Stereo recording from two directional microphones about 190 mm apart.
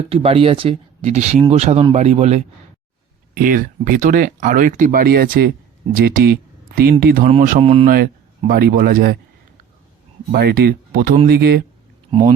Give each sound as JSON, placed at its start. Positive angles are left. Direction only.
{"t": 0.1, "sound": "speech", "side_deg": -30}
{"t": 3.3, "sound": "speech", "side_deg": -45}
{"t": 7.6, "sound": "speech", "side_deg": -30}
{"t": 7.9, "sound": "speech", "side_deg": -50}
{"t": 10.3, "sound": "speech", "side_deg": -55}